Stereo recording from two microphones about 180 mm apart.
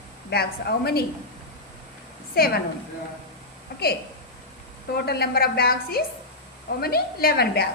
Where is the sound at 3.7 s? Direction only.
60° left (ahead or behind).